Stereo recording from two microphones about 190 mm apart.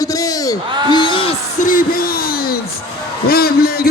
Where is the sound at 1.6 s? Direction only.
45° left (ahead or behind).